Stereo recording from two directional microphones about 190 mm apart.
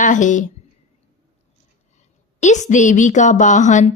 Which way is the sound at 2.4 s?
40° left (ahead or behind).